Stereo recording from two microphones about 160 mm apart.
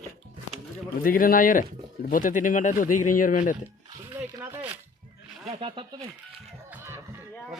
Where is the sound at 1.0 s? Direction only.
60° left (ahead or behind).